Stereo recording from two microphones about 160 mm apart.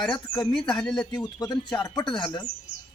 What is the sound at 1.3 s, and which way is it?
Speech, 25° left (ahead or behind).